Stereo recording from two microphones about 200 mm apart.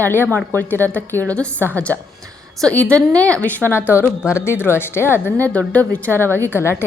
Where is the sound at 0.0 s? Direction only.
10° left (ahead or behind).